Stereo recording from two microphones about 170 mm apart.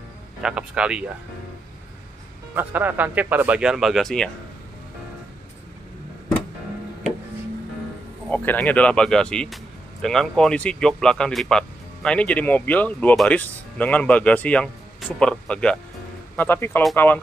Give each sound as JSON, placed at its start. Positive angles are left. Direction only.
{"t": 0.4, "sound": "speech", "side_deg": -5}
{"t": 2.5, "sound": "speech", "side_deg": -10}
{"t": 8.3, "sound": "a man's voice", "side_deg": 10}